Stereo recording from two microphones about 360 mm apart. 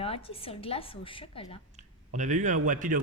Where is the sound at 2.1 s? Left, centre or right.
Centre.